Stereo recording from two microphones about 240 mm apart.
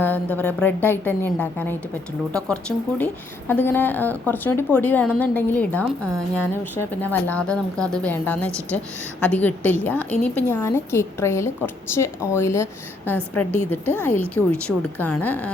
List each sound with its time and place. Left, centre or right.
0.0 s a woman's voice: centre